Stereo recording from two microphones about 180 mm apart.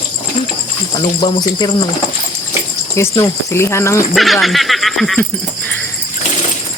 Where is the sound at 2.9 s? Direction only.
20° left (ahead or behind).